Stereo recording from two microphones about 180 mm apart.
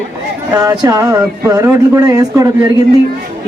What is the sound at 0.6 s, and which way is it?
Speech, 20° right (ahead or behind).